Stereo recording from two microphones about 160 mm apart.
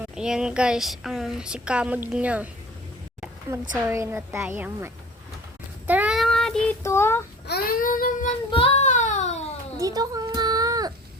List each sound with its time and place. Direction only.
0.0 s speech: 5° right (ahead or behind)
3.5 s a woman's voice: 20° right (ahead or behind)
5.9 s child singing: 5° right (ahead or behind)
6.8 s speech: 15° left (ahead or behind)
7.4 s child singing: 75° left (ahead or behind); by 8.3 s 60° left (ahead or behind)
8.4 s child singing: 35° left (ahead or behind)
9.7 s a sound: 25° right (ahead or behind)